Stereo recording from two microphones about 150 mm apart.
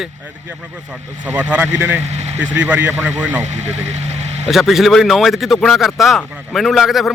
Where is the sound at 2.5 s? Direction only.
10° right (ahead or behind).